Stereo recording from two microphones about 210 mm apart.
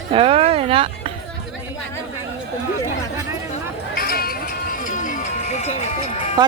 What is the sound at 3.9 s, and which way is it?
Music, 45° left (ahead or behind).